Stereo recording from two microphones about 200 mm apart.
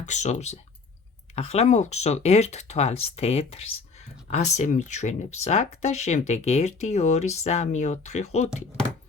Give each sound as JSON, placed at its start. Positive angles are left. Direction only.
{"t": 0.0, "sound": "speech", "side_deg": 35}